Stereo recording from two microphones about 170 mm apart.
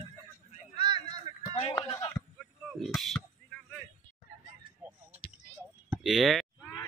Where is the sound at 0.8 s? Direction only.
25° right (ahead or behind).